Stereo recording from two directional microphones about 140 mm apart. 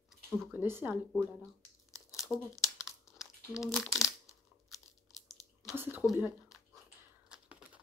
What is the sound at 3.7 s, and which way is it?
Speech, centre (ahead or behind).